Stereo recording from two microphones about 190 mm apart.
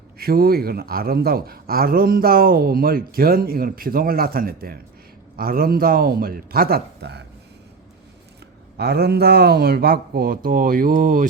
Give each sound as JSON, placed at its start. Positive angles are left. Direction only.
{"t": 0.2, "sound": "speech", "side_deg": -50}
{"t": 8.8, "sound": "speech", "side_deg": -55}